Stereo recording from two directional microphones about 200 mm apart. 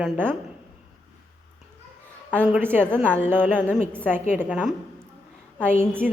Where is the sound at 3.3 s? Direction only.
10° right (ahead or behind).